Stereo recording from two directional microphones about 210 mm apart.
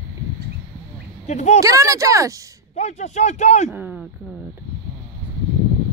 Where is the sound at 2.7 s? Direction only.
30° left (ahead or behind).